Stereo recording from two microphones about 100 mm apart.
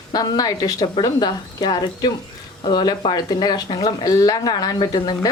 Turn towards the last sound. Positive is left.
turn(degrees=45)  # may be behind; listen again after turning